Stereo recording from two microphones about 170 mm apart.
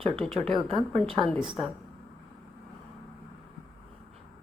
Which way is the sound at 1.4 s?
Centre (ahead or behind).